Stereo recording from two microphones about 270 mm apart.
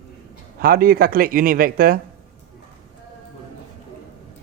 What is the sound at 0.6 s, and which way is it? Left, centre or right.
Speech, right.